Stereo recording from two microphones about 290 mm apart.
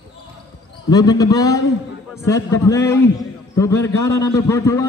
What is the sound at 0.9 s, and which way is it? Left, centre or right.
A man's voice, centre.